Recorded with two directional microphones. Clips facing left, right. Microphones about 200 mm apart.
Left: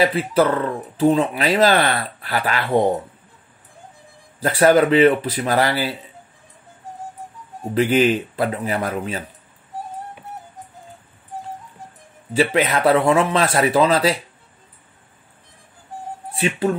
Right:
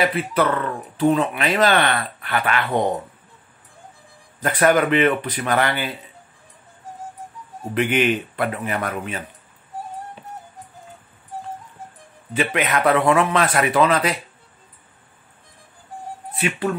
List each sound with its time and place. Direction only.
0.0 s speech: 30° left (ahead or behind)
4.4 s speech: 30° left (ahead or behind)
7.7 s speech: 30° left (ahead or behind)
12.4 s speech: 30° left (ahead or behind)
16.3 s speech: 25° left (ahead or behind)